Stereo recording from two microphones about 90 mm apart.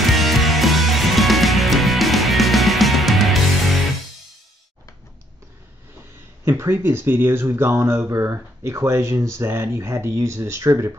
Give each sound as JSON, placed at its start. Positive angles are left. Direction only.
{"t": 0.0, "sound": "music", "side_deg": 0}
{"t": 6.4, "sound": "speech", "side_deg": -30}